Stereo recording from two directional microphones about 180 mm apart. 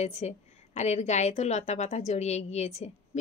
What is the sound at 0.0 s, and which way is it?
A woman's voice, 40° left (ahead or behind).